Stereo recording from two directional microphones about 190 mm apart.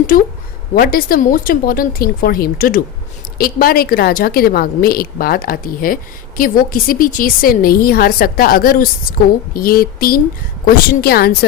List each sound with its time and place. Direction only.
0.1 s a woman's voice: 45° left (ahead or behind)